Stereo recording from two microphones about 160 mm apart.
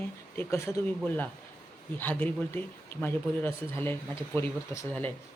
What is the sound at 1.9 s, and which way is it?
Speech, 10° left (ahead or behind).